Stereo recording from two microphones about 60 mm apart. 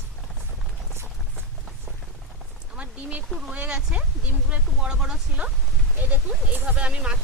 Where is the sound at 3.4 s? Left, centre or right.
Centre.